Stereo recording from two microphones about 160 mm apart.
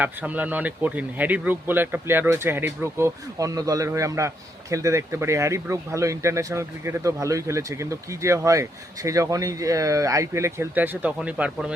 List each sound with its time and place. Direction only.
0.0 s speech: 10° right (ahead or behind)